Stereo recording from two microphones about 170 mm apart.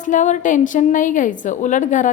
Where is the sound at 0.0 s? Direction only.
45° left (ahead or behind).